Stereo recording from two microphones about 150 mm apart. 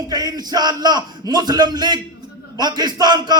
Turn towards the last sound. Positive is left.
turn(degrees=-30)  # may be behind; listen again after turning